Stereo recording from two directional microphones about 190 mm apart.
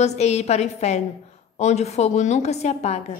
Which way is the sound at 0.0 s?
35° left (ahead or behind).